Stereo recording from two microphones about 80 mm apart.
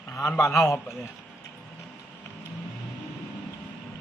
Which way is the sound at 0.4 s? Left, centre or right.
Left.